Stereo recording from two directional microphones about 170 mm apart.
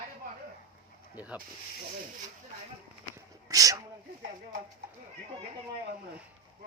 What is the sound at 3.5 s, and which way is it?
Speech, 20° right (ahead or behind).